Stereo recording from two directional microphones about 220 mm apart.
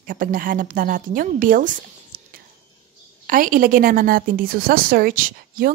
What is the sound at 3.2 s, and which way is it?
A woman's voice, 40° right (ahead or behind).